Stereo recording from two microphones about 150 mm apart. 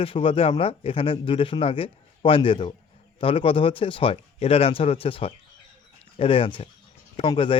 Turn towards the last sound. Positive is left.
turn(degrees=35)  # may be behind; listen again after turning